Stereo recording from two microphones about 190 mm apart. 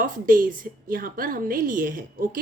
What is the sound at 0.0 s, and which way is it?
Speech, 45° right (ahead or behind).